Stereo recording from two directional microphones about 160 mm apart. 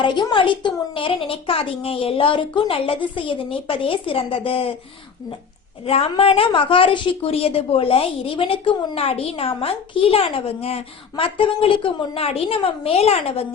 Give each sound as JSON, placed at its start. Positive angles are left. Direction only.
{"t": 0.0, "sound": "a woman's voice", "side_deg": 30}
{"t": 5.8, "sound": "a woman's voice", "side_deg": 35}